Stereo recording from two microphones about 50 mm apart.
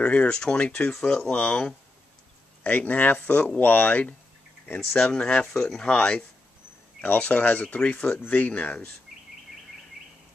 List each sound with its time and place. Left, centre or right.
0.0 s speech: left
2.6 s speech: left
4.9 s speech: centre